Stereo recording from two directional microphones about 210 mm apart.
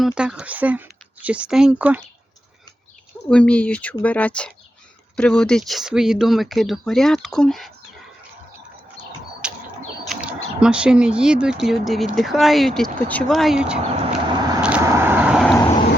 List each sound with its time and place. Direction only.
0.0 s speech: 5° right (ahead or behind)
3.2 s speech: 5° left (ahead or behind)
9.4 s bird: 5° right (ahead or behind)
10.0 s speech: 5° right (ahead or behind)
13.7 s vehicle: 30° right (ahead or behind); by 15.5 s 5° right (ahead or behind)